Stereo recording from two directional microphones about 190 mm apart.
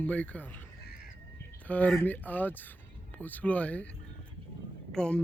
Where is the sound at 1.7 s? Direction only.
10° left (ahead or behind).